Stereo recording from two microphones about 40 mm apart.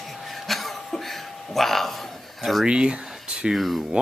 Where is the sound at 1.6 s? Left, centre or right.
Centre.